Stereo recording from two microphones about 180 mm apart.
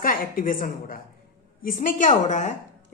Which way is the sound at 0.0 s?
50° left (ahead or behind).